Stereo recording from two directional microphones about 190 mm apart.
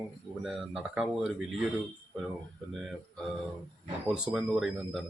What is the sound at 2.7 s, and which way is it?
Speech, centre (ahead or behind).